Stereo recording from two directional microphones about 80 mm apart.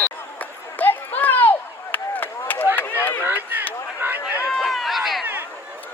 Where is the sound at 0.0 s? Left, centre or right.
Left.